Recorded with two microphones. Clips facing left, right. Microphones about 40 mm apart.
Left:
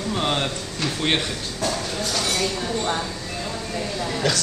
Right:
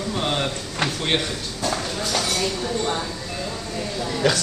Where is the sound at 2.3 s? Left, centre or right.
Centre.